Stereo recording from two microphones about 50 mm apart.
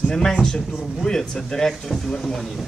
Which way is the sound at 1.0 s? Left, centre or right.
Centre.